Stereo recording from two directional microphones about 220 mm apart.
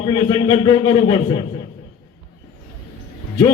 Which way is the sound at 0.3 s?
20° left (ahead or behind).